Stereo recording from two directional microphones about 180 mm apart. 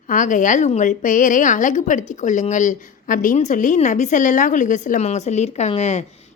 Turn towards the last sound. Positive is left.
turn(degrees=35)  # may be behind; listen again after turning